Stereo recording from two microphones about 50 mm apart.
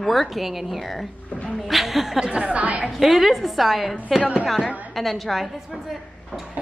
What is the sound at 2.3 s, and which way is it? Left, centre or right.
Speech, right.